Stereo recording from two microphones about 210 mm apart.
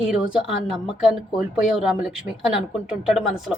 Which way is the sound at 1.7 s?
5° right (ahead or behind).